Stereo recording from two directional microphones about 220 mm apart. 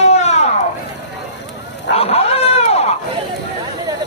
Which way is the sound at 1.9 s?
25° left (ahead or behind).